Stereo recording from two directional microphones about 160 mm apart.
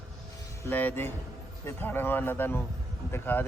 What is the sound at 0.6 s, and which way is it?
Speech, 10° left (ahead or behind).